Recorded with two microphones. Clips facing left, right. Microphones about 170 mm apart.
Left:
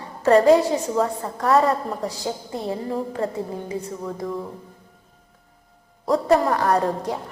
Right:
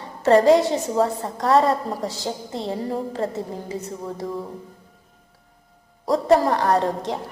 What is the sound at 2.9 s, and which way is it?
Speech, 30° right (ahead or behind).